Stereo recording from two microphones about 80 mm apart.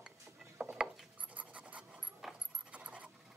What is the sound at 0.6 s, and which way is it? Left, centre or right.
Ratchet, centre.